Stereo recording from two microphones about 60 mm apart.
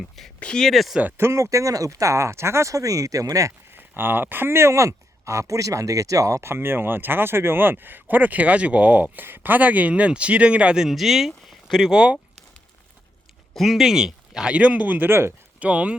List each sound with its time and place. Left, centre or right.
0.3 s speech: centre
1.1 s speech: right
3.8 s speech: right
6.4 s speech: right; by 10.8 s centre
10.8 s speech: centre
11.9 s speech: centre
13.6 s speech: centre
14.5 s speech: right
15.6 s speech: right